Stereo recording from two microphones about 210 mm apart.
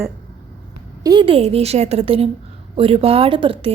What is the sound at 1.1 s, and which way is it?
A woman's voice, 25° right (ahead or behind).